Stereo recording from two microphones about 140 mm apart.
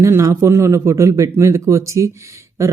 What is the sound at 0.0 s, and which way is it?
Speech, 20° right (ahead or behind).